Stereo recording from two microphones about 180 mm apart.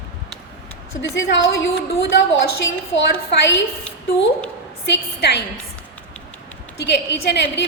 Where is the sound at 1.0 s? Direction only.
90° left.